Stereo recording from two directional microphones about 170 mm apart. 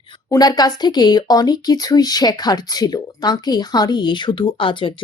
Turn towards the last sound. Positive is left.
turn(degrees=30)  # may be behind; listen again after turning